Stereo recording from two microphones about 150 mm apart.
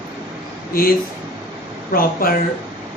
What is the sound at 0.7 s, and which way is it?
Speech, 75° left (ahead or behind).